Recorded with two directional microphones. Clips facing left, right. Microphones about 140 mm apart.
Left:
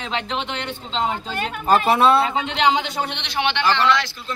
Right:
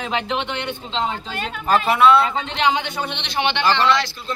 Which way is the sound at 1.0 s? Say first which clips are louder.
Left 3 dB; 10° left (ahead or behind).